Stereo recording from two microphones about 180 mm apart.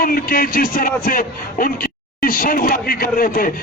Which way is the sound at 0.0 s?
55° left (ahead or behind).